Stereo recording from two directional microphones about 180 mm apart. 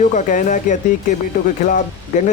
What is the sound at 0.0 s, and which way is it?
Speech, 45° left (ahead or behind).